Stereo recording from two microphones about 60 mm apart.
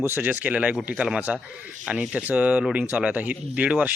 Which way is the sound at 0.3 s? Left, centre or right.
Right.